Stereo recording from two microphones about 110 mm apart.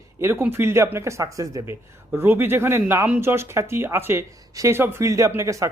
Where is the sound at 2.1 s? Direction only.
20° right (ahead or behind).